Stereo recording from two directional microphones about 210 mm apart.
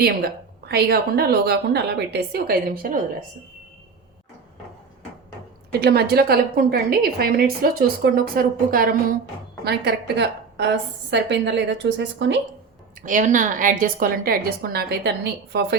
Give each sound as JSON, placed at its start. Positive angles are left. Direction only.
{"t": 0.0, "sound": "a woman's voice", "side_deg": -50}
{"t": 5.8, "sound": "a woman's voice", "side_deg": -50}
{"t": 13.1, "sound": "a woman's voice", "side_deg": -40}